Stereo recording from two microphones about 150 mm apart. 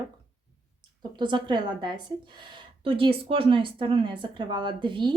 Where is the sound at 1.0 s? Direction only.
30° right (ahead or behind).